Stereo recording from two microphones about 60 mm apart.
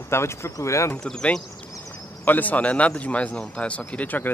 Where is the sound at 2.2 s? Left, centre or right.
Left.